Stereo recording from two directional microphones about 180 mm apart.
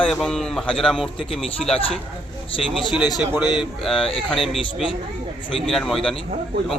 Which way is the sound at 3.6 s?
Centre (ahead or behind).